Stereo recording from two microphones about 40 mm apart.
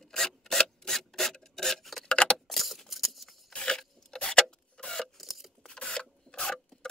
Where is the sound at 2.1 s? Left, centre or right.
Left.